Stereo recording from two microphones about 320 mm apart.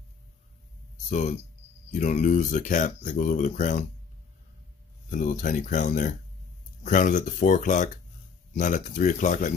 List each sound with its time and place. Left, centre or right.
1.0 s speech: left
5.1 s speech: left